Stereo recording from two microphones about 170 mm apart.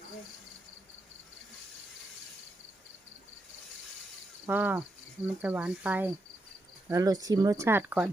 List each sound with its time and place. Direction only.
4.4 s speech: 10° right (ahead or behind)
6.8 s speech: 20° right (ahead or behind)